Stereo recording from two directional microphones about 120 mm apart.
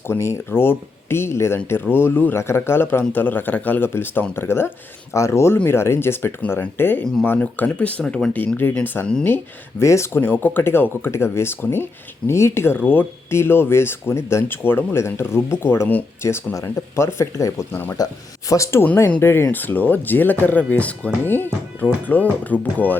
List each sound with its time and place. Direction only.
0.1 s speech: 20° left (ahead or behind)